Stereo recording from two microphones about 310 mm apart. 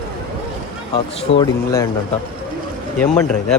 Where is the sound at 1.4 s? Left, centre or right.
Centre.